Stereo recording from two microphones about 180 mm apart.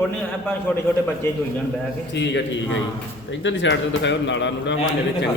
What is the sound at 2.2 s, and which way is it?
Speech, 75° left (ahead or behind).